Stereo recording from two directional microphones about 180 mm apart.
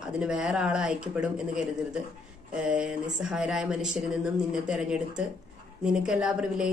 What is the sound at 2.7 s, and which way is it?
Speech, 5° right (ahead or behind).